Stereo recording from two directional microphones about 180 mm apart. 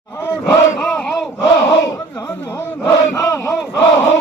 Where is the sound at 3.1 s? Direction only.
15° left (ahead or behind).